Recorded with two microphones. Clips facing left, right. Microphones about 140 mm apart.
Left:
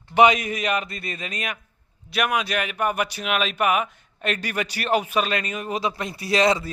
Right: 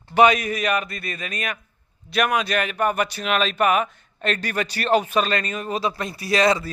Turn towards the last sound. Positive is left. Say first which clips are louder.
# right 1 dB
turn(degrees=20)  # may be behind; listen again after turning